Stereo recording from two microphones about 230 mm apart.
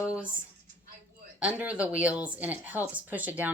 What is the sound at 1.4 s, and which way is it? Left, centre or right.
A woman's voice, centre.